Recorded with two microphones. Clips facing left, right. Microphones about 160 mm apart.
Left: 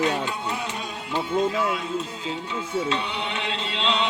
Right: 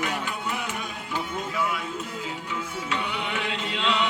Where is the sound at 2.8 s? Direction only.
25° left (ahead or behind).